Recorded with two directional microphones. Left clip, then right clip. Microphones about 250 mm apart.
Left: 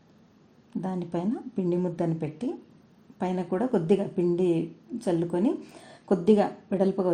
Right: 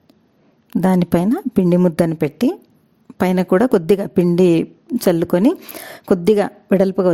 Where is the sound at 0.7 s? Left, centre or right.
Right.